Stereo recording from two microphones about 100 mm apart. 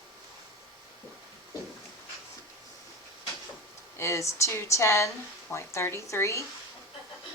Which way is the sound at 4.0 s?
30° left (ahead or behind).